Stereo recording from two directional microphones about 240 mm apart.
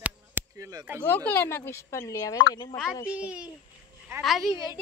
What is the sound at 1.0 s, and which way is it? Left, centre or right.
Speech, centre.